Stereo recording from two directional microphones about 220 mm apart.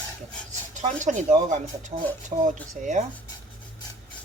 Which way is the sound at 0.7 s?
35° right (ahead or behind).